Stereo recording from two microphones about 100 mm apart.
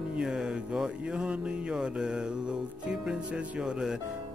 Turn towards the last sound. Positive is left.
turn(degrees=-5)  # may be behind; listen again after turning